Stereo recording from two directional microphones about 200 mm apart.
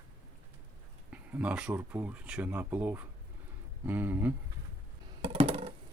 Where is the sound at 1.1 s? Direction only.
5° right (ahead or behind).